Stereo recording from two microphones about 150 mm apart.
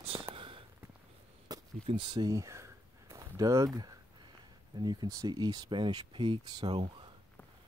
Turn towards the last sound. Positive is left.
turn(degrees=-30)  # may be behind; listen again after turning